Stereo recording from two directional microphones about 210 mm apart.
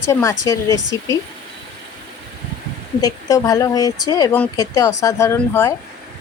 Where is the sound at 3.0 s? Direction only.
15° left (ahead or behind).